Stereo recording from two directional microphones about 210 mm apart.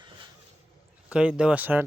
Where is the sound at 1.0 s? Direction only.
5° right (ahead or behind).